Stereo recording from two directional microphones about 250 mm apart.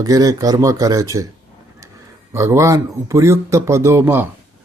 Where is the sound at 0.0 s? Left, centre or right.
Centre.